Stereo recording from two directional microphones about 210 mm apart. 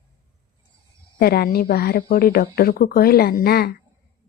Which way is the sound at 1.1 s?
45° left (ahead or behind).